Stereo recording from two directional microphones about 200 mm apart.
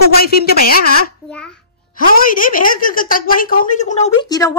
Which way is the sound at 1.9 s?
45° left (ahead or behind).